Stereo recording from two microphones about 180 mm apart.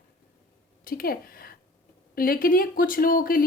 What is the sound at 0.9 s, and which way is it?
Speech, 55° left (ahead or behind).